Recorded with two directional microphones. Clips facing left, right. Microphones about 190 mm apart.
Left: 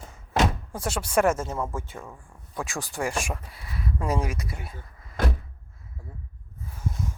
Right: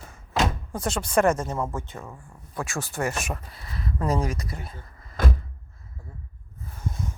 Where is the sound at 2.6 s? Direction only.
15° left (ahead or behind).